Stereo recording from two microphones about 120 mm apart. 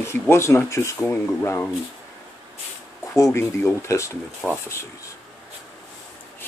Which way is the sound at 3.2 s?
25° left (ahead or behind).